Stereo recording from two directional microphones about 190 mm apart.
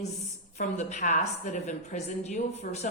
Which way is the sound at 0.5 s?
40° left (ahead or behind).